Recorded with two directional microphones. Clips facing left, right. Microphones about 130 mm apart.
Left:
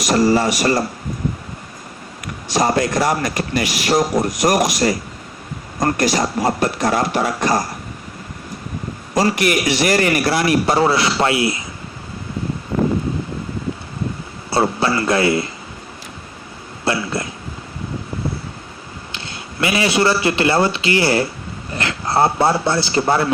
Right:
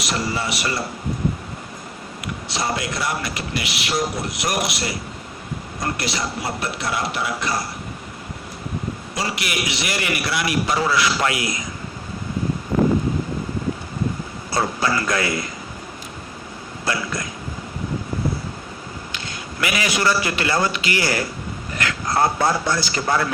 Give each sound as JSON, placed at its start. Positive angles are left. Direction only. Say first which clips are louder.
{"t": 0.1, "sound": "a man's voice", "louder": "left 11 dB", "side_deg": 40}
{"t": 2.2, "sound": "a man's voice", "louder": "left 7 dB", "side_deg": 45}
{"t": 9.1, "sound": "a man's voice", "louder": "left 11 dB", "side_deg": 45}
{"t": 14.5, "sound": "a man's voice", "louder": "left 4 dB", "side_deg": 30}
{"t": 16.8, "sound": "speech", "louder": "left 5 dB", "side_deg": 30}
{"t": 19.5, "sound": "a man's voice", "louder": "left 6 dB", "side_deg": 30}